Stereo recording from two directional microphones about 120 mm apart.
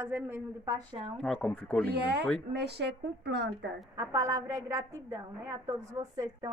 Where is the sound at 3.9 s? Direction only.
25° right (ahead or behind).